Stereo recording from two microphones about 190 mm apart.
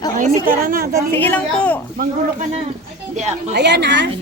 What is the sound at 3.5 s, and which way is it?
Speech, 65° right (ahead or behind).